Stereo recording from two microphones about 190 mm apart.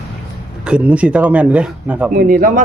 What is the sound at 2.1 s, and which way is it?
Speech, 50° right (ahead or behind).